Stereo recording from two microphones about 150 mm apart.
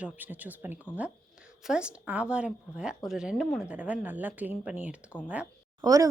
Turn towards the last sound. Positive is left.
turn(degrees=-25)  # may be behind; listen again after turning